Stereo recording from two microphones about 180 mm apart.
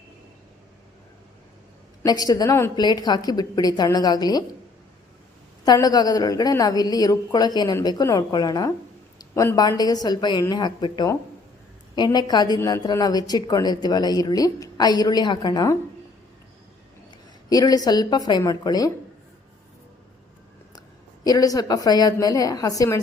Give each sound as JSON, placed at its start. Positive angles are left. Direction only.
{"t": 2.0, "sound": "a woman's voice", "side_deg": 20}
{"t": 5.6, "sound": "a woman's voice", "side_deg": 20}
{"t": 17.5, "sound": "a woman's voice", "side_deg": 20}
{"t": 21.2, "sound": "a woman's voice", "side_deg": 20}